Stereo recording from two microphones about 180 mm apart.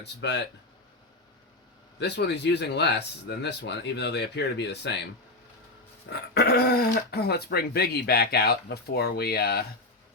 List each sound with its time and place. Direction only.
0.0 s speech: 75° left (ahead or behind)
2.0 s speech: 70° left (ahead or behind)
6.1 s speech: 65° left (ahead or behind)